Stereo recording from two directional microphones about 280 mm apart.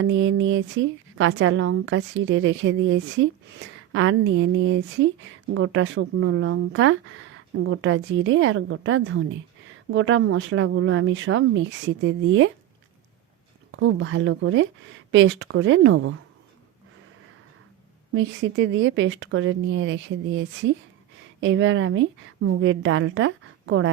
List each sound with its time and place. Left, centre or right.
0.0 s a woman's voice: right
13.7 s a woman's voice: right
18.1 s a woman's voice: right